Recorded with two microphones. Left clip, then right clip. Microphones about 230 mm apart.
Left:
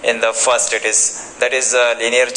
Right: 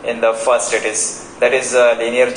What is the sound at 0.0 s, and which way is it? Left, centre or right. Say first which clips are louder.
A man's voice: even; left.